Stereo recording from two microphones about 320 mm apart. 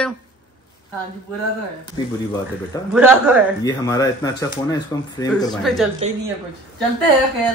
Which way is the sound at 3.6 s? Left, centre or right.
Centre.